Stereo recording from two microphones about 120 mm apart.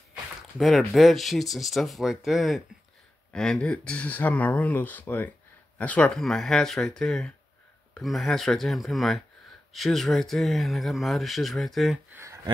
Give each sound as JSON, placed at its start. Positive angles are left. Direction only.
{"t": 0.6, "sound": "speech", "side_deg": 0}
{"t": 12.1, "sound": "speech", "side_deg": -20}